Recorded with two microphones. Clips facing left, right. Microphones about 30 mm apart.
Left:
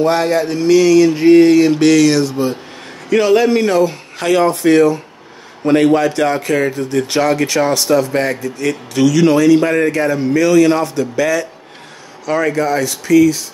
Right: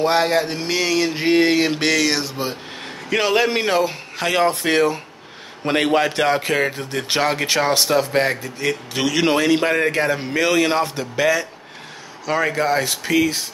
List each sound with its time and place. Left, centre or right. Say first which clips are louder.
0.0 s a man's voice: left 3 dB; right
1.9 s a man's voice: left 8 dB; centre
4.5 s a man's voice: left 7 dB; right
12.3 s a man's voice: left 4 dB; centre
12.6 s a man's voice: left 3 dB; right